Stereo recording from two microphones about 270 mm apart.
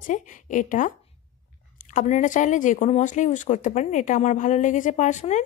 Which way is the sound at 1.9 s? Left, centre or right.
Left.